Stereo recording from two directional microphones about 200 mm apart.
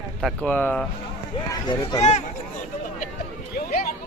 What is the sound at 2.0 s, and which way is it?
Speech, 35° left (ahead or behind).